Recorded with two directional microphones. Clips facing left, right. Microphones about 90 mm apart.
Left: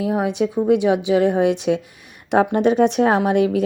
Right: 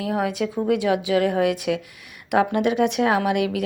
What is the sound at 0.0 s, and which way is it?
A woman's voice, 25° left (ahead or behind).